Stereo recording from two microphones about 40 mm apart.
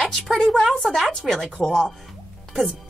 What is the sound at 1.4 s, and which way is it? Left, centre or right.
Speech, centre.